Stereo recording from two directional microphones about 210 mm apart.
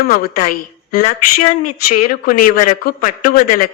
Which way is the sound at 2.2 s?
40° left (ahead or behind).